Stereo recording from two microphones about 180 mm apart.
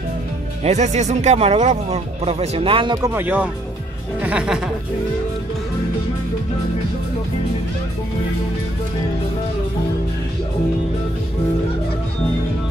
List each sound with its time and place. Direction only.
0.7 s speech: 40° right (ahead or behind)
3.2 s speech: 10° right (ahead or behind)